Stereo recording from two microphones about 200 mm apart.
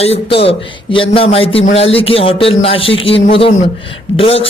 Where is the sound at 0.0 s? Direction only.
30° left (ahead or behind).